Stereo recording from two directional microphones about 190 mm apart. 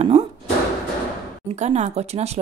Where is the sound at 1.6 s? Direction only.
35° right (ahead or behind).